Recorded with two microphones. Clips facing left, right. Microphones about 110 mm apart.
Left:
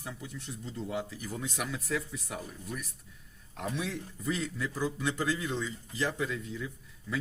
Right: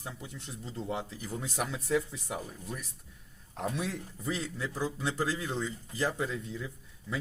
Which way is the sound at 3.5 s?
40° right (ahead or behind).